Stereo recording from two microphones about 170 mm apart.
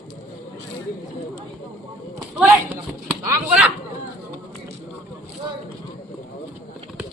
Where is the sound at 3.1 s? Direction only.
10° right (ahead or behind).